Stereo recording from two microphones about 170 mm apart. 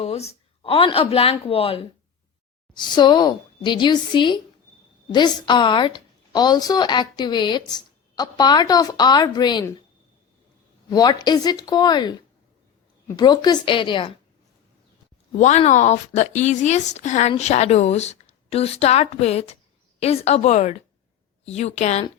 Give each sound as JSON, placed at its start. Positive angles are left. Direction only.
{"t": 0.0, "sound": "a woman's voice", "side_deg": 35}
{"t": 10.8, "sound": "a woman's voice", "side_deg": 25}
{"t": 13.1, "sound": "a woman's voice", "side_deg": 25}
{"t": 15.3, "sound": "speech", "side_deg": 45}